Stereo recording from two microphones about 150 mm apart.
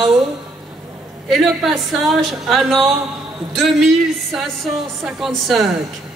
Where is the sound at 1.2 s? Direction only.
Centre (ahead or behind).